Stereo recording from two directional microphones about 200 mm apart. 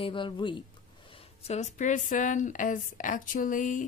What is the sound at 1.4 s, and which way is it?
Speech, 35° left (ahead or behind).